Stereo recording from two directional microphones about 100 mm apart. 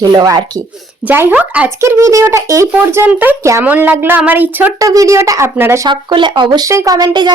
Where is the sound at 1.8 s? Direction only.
30° right (ahead or behind).